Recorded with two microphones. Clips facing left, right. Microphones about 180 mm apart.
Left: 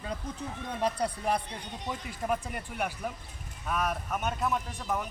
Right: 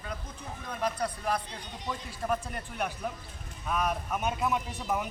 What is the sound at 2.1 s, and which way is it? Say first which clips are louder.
A man's voice: even; 15° left (ahead or behind).